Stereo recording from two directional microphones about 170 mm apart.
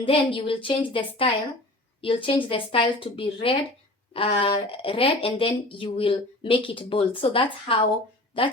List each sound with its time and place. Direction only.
0.0 s speech: 30° left (ahead or behind)